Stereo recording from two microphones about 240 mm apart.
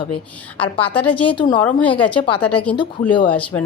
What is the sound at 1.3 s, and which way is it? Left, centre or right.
Speech, centre.